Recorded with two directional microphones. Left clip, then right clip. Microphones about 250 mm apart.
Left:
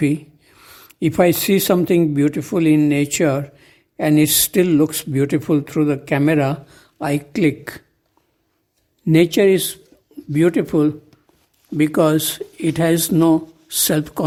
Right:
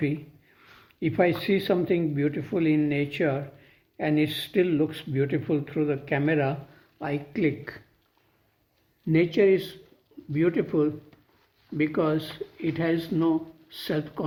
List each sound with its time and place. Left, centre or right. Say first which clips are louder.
0.0 s speech: left 10 dB; left
9.0 s speech: left 7 dB; left